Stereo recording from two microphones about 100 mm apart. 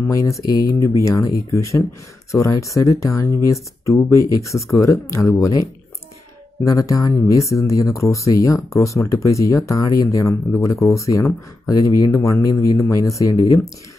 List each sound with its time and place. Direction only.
0.1 s speech: 30° left (ahead or behind)